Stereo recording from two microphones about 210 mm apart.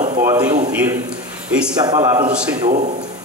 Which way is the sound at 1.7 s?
20° right (ahead or behind).